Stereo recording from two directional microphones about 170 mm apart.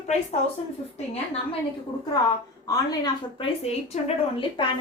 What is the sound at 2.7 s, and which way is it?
Speech, 20° left (ahead or behind).